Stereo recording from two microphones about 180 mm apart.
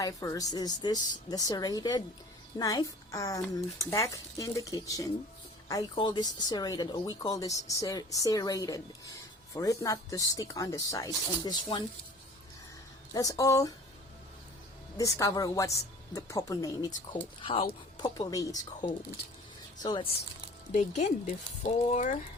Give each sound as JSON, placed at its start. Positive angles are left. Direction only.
{"t": 0.0, "sound": "speech", "side_deg": 15}
{"t": 13.1, "sound": "speech", "side_deg": 20}
{"t": 14.9, "sound": "speech", "side_deg": 20}
{"t": 20.7, "sound": "speech", "side_deg": 40}